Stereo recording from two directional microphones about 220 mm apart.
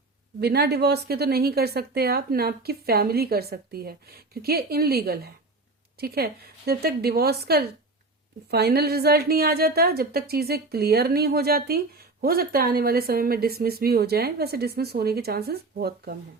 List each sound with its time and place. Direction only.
0.3 s speech: 45° right (ahead or behind)